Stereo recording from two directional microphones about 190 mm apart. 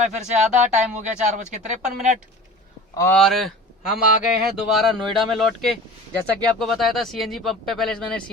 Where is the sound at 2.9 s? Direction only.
15° left (ahead or behind).